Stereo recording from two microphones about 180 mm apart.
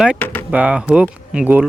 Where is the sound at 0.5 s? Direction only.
5° right (ahead or behind).